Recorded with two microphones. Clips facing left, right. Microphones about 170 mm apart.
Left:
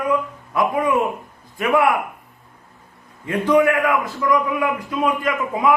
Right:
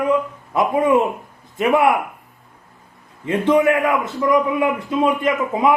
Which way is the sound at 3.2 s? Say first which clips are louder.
Right 1 dB; 25° right (ahead or behind).